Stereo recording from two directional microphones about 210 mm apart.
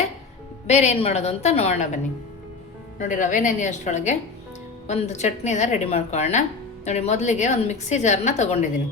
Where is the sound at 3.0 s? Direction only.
40° left (ahead or behind).